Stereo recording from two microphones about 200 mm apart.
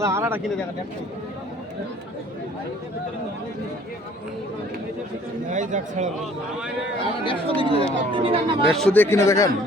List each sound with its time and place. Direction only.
0.0 s speech: 15° right (ahead or behind)
5.5 s a man's voice: 40° right (ahead or behind)
7.3 s speech: 30° left (ahead or behind)
8.1 s speech: 25° right (ahead or behind)
8.7 s speech: 5° left (ahead or behind)